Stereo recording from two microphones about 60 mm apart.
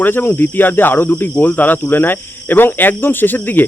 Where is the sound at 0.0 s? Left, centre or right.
Left.